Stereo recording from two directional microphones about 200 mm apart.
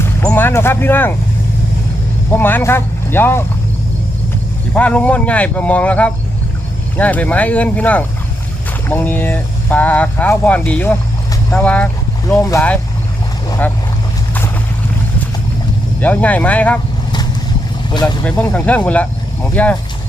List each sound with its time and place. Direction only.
0.3 s speech: 10° left (ahead or behind)
2.3 s speech: 10° left (ahead or behind)
4.7 s speech: 5° left (ahead or behind)
16.0 s speech: 10° left (ahead or behind)
17.9 s speech: 20° left (ahead or behind)
18.3 s speech: 5° left (ahead or behind)